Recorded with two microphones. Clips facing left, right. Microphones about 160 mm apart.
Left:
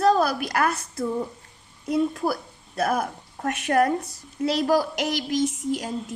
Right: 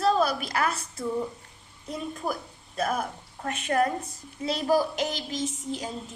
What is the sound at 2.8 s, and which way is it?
A woman's voice, 70° left (ahead or behind).